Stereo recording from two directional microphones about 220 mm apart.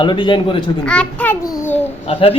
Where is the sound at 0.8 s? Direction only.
5° left (ahead or behind).